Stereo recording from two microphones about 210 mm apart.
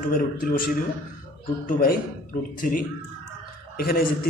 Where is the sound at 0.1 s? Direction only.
40° left (ahead or behind).